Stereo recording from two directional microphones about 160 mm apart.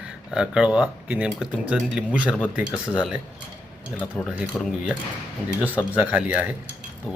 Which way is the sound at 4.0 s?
10° left (ahead or behind).